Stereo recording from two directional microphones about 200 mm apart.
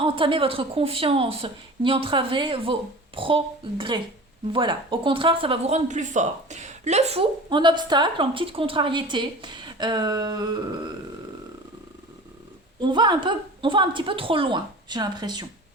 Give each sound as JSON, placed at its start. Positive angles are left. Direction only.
{"t": 0.0, "sound": "speech", "side_deg": -25}
{"t": 12.8, "sound": "speech", "side_deg": -20}